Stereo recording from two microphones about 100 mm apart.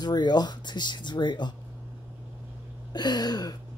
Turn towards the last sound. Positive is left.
turn(degrees=40)  # may be behind; listen again after turning